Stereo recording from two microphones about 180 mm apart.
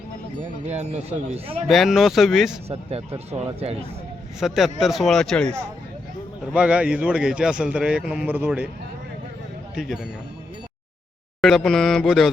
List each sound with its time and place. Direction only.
0.7 s speech: 40° right (ahead or behind)
1.6 s a man's voice: centre (ahead or behind)
2.6 s speech: 35° right (ahead or behind)
4.4 s a man's voice: centre (ahead or behind)
9.7 s a man's voice: centre (ahead or behind)
11.3 s a man's voice: centre (ahead or behind)